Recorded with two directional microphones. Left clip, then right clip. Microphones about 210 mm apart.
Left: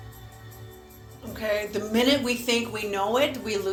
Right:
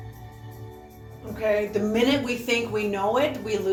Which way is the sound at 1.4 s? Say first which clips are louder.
Right 4 dB; 40° left (ahead or behind).